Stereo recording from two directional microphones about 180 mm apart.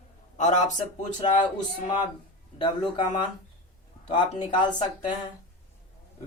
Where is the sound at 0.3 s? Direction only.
40° left (ahead or behind).